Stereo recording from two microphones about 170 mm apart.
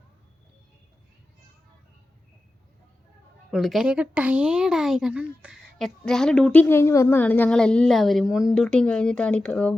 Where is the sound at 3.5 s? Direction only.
Centre (ahead or behind).